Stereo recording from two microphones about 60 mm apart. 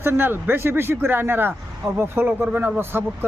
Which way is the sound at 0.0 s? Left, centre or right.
Right.